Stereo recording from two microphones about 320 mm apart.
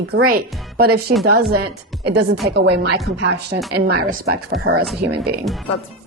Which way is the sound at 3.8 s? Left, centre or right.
Right.